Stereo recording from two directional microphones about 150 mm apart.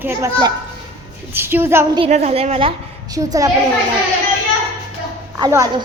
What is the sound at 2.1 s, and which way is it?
Speech, 45° right (ahead or behind).